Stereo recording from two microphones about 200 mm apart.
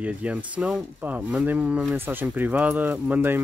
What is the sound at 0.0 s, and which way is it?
Speech, 5° right (ahead or behind).